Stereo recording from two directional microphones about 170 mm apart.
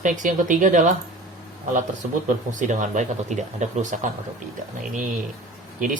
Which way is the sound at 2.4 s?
45° right (ahead or behind).